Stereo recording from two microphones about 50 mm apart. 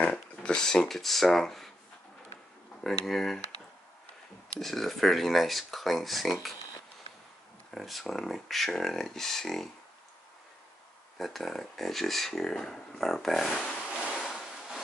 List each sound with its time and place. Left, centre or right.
0.1 s speech: centre
2.8 s speech: centre
4.6 s speech: centre
7.7 s speech: centre
11.1 s speech: centre
13.9 s a sound: left
14.2 s a sound: centre